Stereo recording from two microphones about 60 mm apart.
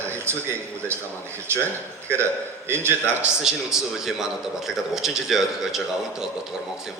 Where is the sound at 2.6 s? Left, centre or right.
Right.